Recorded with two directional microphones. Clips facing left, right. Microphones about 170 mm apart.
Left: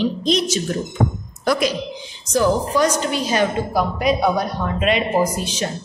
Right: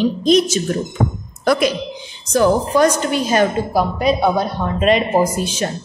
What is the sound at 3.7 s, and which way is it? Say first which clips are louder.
Speech: right 2 dB; 30° right (ahead or behind).